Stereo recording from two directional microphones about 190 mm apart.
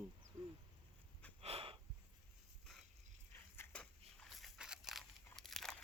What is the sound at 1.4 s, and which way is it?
Snort, 30° right (ahead or behind).